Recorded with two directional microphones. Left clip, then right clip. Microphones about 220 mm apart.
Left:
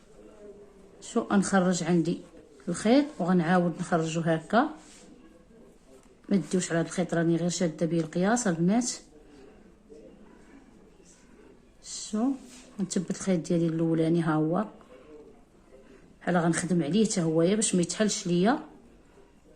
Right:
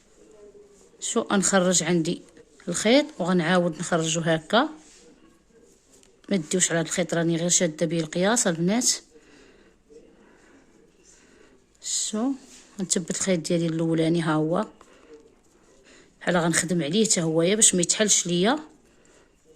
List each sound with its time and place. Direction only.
0.9 s speech: 40° right (ahead or behind)
6.2 s speech: 40° right (ahead or behind)
11.8 s a sound: 40° right (ahead or behind)
12.7 s speech: 40° right (ahead or behind)
16.2 s speech: 40° right (ahead or behind)